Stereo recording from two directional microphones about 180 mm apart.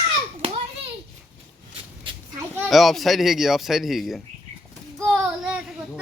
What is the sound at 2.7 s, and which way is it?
Speech, centre (ahead or behind).